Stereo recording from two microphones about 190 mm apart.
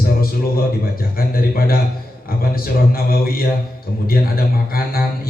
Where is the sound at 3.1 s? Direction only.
50° left (ahead or behind).